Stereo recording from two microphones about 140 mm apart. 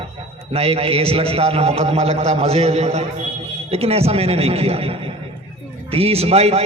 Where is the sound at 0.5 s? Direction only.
45° right (ahead or behind).